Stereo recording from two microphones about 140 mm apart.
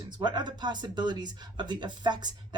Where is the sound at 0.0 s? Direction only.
30° right (ahead or behind).